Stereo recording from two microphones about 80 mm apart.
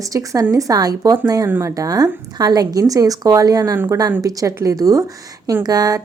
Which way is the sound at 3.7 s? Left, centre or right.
Right.